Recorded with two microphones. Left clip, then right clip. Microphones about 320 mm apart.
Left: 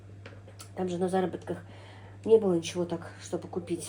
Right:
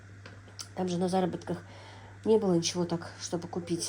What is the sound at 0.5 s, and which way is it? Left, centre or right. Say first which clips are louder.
Speech: even; right.